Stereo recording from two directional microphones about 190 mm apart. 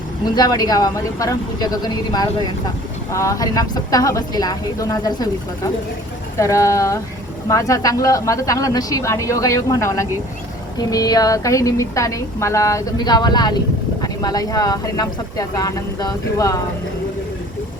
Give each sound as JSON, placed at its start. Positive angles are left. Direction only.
{"t": 0.3, "sound": "a woman's voice", "side_deg": 20}
{"t": 6.4, "sound": "a woman's voice", "side_deg": 15}